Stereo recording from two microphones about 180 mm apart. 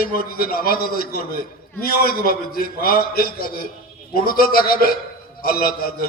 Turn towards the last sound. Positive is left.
turn(degrees=55)  # may be behind; listen again after turning